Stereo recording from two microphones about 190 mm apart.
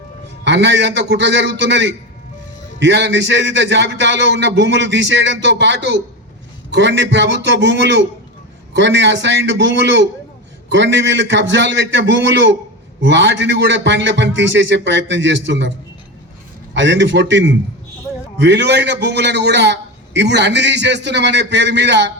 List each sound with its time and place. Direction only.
0.4 s speech: 70° right (ahead or behind)
16.7 s a man's voice: 75° right (ahead or behind)